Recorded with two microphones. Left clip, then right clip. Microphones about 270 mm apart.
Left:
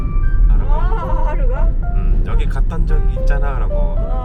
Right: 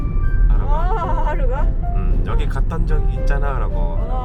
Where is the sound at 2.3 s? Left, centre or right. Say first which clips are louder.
Right 1 dB; centre.